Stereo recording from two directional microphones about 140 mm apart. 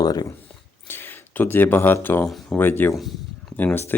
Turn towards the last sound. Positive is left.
turn(degrees=15)  # may be behind; listen again after turning